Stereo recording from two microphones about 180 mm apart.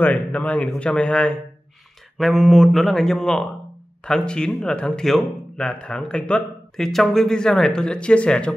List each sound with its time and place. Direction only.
0.0 s speech: 10° left (ahead or behind)